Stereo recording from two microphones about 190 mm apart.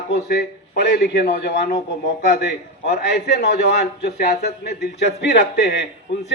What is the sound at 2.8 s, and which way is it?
A man's voice, 60° left (ahead or behind).